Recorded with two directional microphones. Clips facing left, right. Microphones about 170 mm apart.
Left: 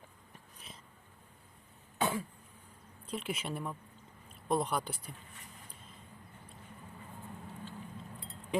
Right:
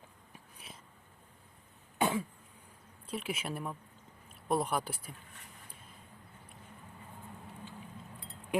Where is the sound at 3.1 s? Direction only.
5° right (ahead or behind).